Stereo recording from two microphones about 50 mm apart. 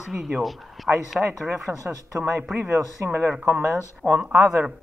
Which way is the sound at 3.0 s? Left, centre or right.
Right.